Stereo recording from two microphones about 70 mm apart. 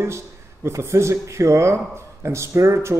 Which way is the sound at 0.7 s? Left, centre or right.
Right.